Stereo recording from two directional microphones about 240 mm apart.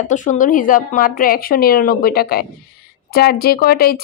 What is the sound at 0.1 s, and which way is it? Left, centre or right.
Speech, left.